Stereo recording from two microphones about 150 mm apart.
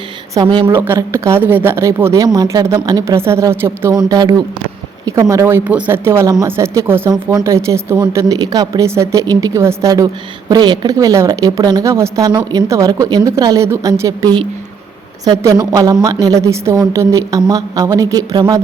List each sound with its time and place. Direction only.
0.6 s speech: 15° right (ahead or behind)
3.9 s speech: 25° right (ahead or behind)